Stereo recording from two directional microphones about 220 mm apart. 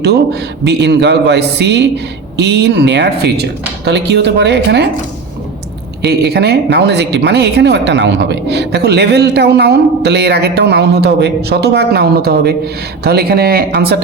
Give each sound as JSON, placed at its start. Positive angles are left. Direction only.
{"t": 0.6, "sound": "a woman's voice", "side_deg": -50}
{"t": 6.0, "sound": "a woman's voice", "side_deg": -45}